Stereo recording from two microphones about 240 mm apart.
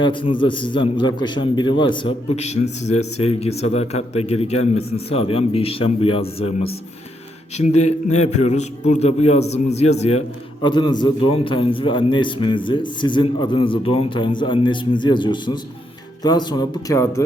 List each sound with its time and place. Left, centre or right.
0.0 s a man's voice: centre